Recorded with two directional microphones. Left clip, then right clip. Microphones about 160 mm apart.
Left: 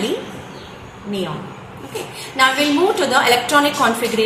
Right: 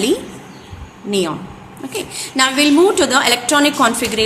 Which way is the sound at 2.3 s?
80° right.